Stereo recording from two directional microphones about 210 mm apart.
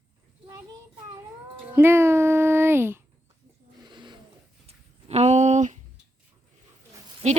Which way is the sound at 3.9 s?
20° right (ahead or behind).